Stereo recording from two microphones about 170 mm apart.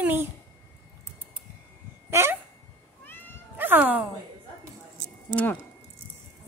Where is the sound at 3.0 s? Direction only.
10° left (ahead or behind).